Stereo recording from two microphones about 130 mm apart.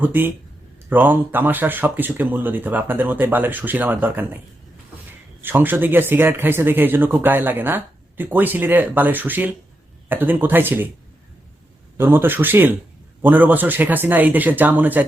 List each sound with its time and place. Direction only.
0.0 s speech: 15° right (ahead or behind)
5.4 s speech: 15° right (ahead or behind)
11.9 s speech: 15° right (ahead or behind)